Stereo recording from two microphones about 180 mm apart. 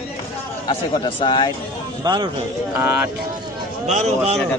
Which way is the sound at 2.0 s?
25° right (ahead or behind).